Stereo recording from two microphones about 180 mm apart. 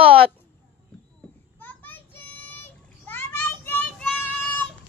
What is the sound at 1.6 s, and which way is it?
Child singing, 10° left (ahead or behind).